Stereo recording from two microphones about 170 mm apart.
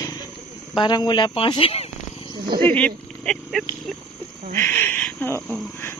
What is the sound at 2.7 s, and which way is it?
Speech, 5° left (ahead or behind).